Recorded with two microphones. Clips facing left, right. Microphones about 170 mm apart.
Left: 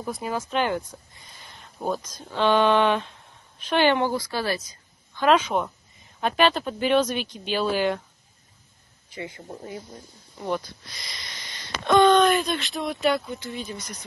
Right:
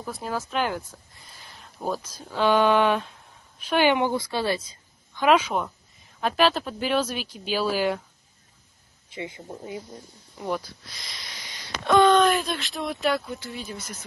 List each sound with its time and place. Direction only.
0.1 s speech: centre (ahead or behind); by 4.7 s 25° right (ahead or behind)
5.1 s speech: 10° right (ahead or behind)
9.1 s speech: 25° right (ahead or behind)
9.4 s speech: 5° right (ahead or behind)